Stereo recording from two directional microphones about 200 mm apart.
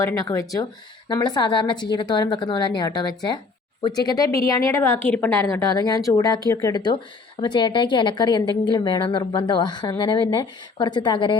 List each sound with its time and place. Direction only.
0.0 s a woman's voice: 15° left (ahead or behind)